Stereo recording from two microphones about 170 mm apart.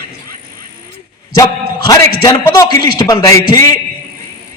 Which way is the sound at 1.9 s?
20° left (ahead or behind).